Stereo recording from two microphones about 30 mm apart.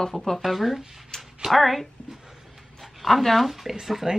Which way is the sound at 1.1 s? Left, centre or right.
Left.